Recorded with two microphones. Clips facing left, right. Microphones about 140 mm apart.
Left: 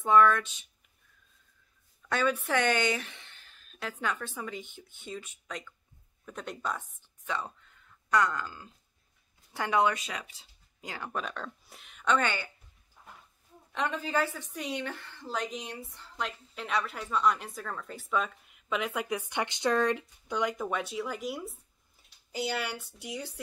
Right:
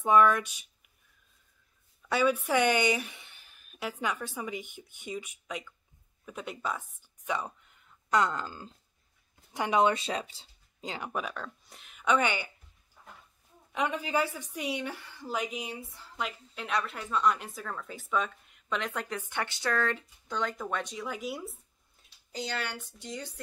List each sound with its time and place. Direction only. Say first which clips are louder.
0.0 s a woman's voice: even; 15° right (ahead or behind)
2.0 s a woman's voice: right 2 dB; 10° right (ahead or behind); by 11.1 s 25° right (ahead or behind)
11.1 s a woman's voice: left 1 dB; 5° right (ahead or behind)
13.7 s a woman's voice: right 1 dB; 10° right (ahead or behind); by 23.4 s 10° left (ahead or behind)